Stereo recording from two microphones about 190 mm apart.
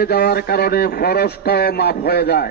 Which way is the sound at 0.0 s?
55° left (ahead or behind).